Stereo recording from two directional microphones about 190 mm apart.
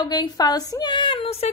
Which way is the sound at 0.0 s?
20° left (ahead or behind).